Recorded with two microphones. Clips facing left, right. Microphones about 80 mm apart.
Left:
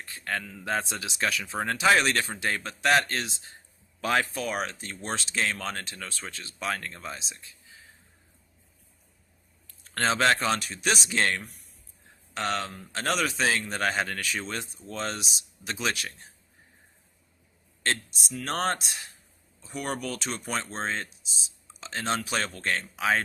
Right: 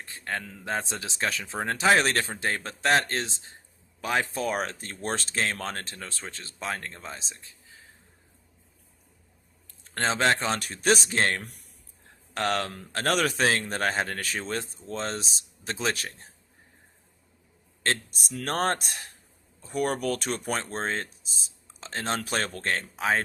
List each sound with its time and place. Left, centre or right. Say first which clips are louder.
0.0 s a sound: left 1 dB; right
0.6 s speech: left 1 dB; right
4.0 s speech: left 1 dB; centre
4.4 s speech: right 2 dB; right
9.9 s speech: left 1 dB; right
10.6 s speech: right 4 dB; right
12.3 s speech: right 2 dB; right
13.8 s speech: left 1 dB; right
18.3 s speech: right 2 dB; right